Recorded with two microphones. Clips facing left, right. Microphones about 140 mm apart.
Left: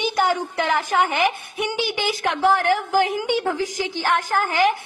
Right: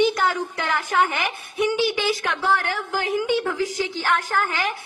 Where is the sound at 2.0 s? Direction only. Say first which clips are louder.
Left 3 dB; 30° left (ahead or behind).